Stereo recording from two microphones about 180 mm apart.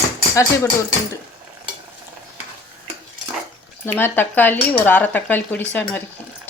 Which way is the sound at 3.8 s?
10° left (ahead or behind).